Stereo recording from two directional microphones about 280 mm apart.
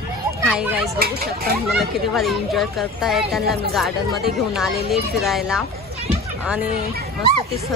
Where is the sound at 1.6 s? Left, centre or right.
Centre.